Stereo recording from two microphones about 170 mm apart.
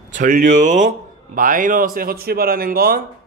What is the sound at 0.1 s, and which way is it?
Speech, 50° right (ahead or behind).